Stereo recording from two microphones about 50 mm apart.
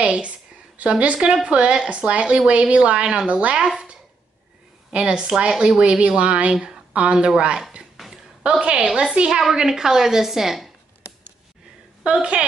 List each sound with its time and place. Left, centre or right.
0.0 s speech: right
3.5 s a woman's voice: centre
8.0 s a sound: centre
8.5 s a woman's voice: right
12.0 s a woman's voice: right